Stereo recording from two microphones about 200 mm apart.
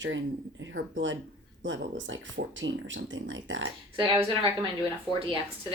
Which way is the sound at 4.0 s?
25° right (ahead or behind).